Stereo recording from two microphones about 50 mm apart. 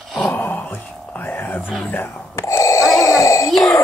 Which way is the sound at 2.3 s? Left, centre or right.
Left.